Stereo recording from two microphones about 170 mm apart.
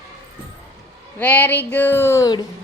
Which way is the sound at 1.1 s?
10° left (ahead or behind).